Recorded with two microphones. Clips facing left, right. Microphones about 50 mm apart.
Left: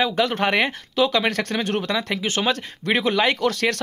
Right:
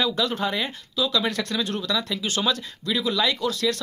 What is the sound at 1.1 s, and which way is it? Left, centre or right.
Speech, left.